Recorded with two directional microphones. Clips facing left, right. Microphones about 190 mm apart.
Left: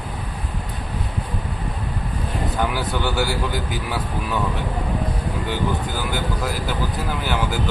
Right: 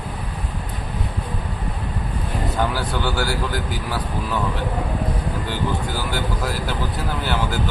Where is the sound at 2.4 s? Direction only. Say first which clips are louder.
Right 1 dB; centre (ahead or behind).